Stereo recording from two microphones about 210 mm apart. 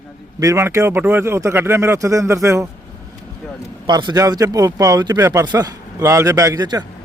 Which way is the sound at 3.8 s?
20° right (ahead or behind).